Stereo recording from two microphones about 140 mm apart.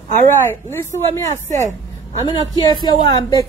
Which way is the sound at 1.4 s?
60° right (ahead or behind).